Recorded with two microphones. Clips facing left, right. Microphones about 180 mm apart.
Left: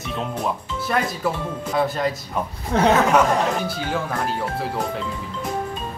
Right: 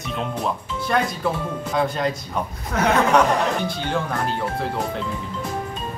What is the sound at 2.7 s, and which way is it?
Speech, 25° left (ahead or behind).